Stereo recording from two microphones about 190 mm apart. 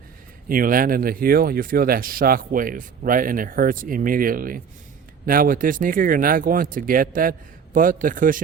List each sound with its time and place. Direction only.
0.4 s speech: 45° right (ahead or behind)